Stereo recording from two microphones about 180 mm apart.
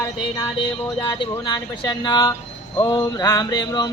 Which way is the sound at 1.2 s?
25° left (ahead or behind).